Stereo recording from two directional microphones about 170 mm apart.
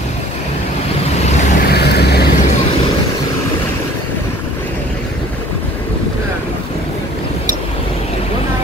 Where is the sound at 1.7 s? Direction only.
70° left (ahead or behind).